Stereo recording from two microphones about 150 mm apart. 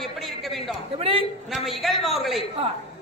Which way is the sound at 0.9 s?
40° right (ahead or behind).